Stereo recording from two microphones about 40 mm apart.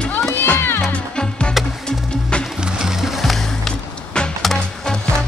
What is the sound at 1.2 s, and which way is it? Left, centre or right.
Music, left.